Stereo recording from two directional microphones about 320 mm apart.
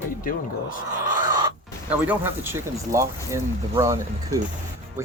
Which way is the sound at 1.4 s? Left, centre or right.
Centre.